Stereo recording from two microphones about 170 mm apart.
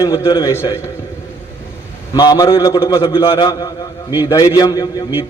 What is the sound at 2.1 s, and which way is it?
A man's voice, 20° left (ahead or behind).